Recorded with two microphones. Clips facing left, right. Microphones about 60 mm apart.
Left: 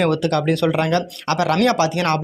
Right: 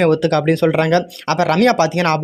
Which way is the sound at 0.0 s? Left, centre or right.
Right.